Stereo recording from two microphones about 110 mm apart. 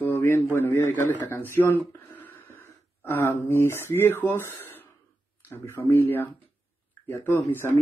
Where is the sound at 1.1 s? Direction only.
20° left (ahead or behind).